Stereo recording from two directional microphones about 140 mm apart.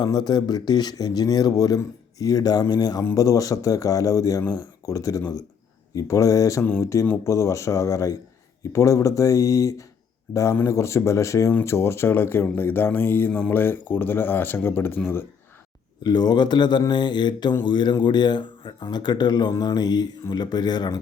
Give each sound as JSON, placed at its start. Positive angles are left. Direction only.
{"t": 0.0, "sound": "speech", "side_deg": 30}
{"t": 16.0, "sound": "speech", "side_deg": 30}